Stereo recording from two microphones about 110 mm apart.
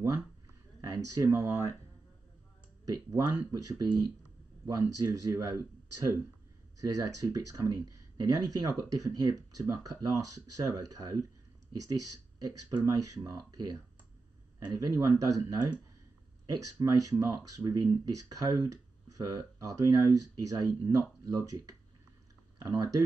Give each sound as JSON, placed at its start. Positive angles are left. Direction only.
{"t": 0.7, "sound": "speech", "side_deg": -30}
{"t": 2.8, "sound": "speech", "side_deg": -30}
{"t": 6.8, "sound": "speech", "side_deg": -30}